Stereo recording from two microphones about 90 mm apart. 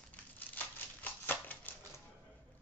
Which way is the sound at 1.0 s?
20° left (ahead or behind).